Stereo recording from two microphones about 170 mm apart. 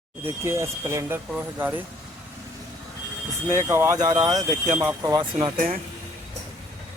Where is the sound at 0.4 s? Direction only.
15° right (ahead or behind).